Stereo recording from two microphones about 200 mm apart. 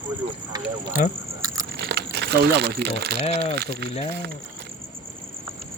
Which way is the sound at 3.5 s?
55° right (ahead or behind).